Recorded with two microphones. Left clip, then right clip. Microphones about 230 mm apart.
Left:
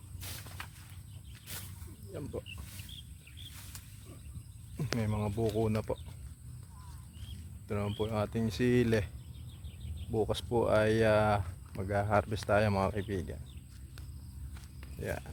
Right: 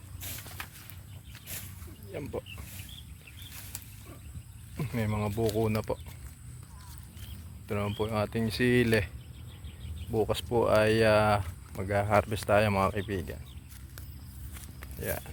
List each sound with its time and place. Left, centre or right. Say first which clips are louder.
0.4 s a sound: right 4 dB; right
4.8 s speech: right 3 dB; centre
7.7 s speech: right 3 dB; centre
10.1 s speech: right 3 dB; centre